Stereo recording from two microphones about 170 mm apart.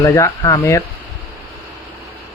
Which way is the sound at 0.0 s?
20° left (ahead or behind).